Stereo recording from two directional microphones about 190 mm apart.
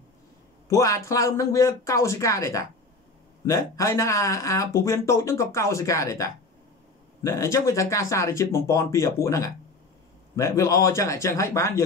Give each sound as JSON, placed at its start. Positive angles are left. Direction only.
{"t": 0.7, "sound": "speech", "side_deg": 15}